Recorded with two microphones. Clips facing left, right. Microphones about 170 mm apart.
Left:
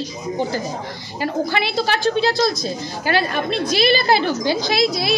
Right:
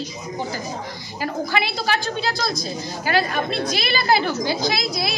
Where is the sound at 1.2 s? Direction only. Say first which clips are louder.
Left 3 dB; 30° left (ahead or behind).